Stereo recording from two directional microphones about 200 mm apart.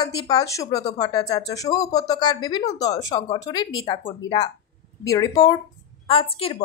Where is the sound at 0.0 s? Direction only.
20° left (ahead or behind).